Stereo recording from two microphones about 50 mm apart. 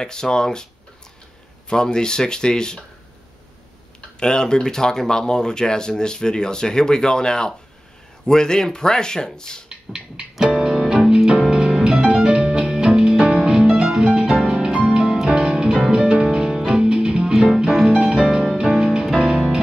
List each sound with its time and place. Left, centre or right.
0.0 s speech: centre
1.7 s speech: centre
4.2 s speech: centre
9.7 s a sound: centre
10.3 s music: centre
10.9 s piano: centre
11.4 s music: centre
13.2 s harp: centre
15.0 s music: centre
17.8 s harp: centre
18.6 s music: centre